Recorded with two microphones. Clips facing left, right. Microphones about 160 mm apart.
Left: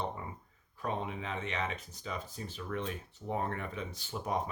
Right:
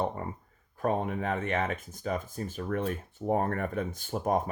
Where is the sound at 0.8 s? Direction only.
50° right (ahead or behind).